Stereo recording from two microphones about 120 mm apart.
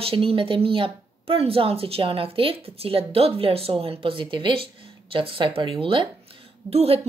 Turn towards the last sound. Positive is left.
turn(degrees=-55)  # may be behind; listen again after turning